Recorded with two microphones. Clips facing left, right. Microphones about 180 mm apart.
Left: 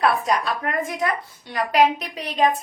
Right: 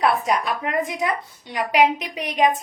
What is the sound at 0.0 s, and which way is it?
Speech, 20° right (ahead or behind).